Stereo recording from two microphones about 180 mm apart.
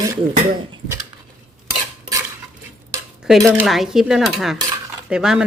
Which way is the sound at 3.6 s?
Centre (ahead or behind).